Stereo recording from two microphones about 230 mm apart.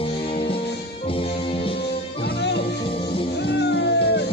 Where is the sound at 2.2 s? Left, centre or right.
Left.